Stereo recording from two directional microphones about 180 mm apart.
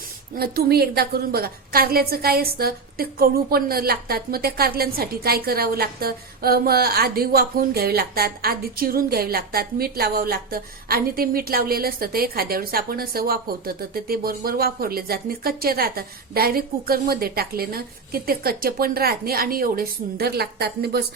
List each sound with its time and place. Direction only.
0.3 s a woman's voice: 60° right (ahead or behind)